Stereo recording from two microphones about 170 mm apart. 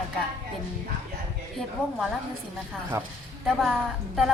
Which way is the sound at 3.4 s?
Centre (ahead or behind).